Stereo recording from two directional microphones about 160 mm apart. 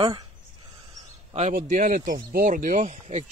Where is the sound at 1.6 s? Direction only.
55° right (ahead or behind).